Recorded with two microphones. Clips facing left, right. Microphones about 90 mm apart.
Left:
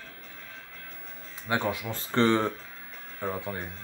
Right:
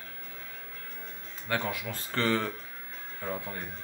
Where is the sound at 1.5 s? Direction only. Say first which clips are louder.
Left 3 dB; 25° left (ahead or behind).